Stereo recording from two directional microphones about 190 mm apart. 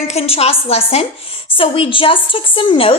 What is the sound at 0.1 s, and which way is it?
A woman's voice, 35° left (ahead or behind).